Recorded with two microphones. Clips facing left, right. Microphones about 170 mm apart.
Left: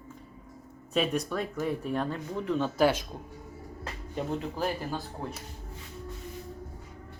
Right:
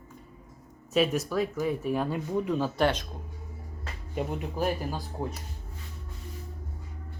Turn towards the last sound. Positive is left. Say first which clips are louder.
# right 1 dB
turn(degrees=-20)  # may be behind; listen again after turning